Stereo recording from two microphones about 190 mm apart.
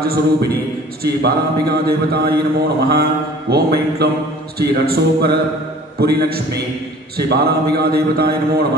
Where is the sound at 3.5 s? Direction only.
55° right (ahead or behind).